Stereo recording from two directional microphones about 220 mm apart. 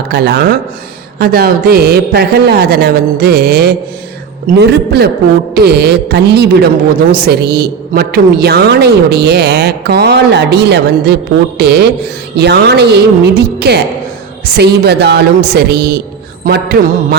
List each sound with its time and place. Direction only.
0.1 s a woman's voice: 50° right (ahead or behind)